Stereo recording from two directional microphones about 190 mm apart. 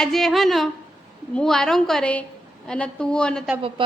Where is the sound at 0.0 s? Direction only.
Centre (ahead or behind).